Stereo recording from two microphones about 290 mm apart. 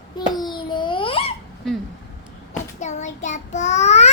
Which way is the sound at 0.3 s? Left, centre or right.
Centre.